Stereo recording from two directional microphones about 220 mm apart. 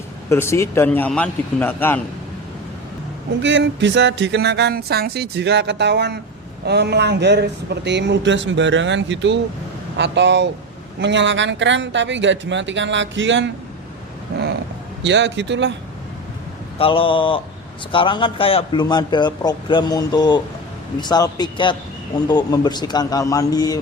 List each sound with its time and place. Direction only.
0.3 s a man's voice: 10° left (ahead or behind)
3.4 s music: 55° right (ahead or behind)
11.0 s speech: 55° right (ahead or behind)
15.0 s music: 55° right (ahead or behind)
16.7 s a man's voice: 25° left (ahead or behind)